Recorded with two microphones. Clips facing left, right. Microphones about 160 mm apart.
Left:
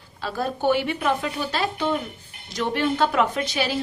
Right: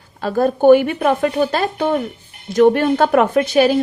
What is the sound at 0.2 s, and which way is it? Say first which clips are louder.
A woman's voice: right 10 dB; 50° right (ahead or behind).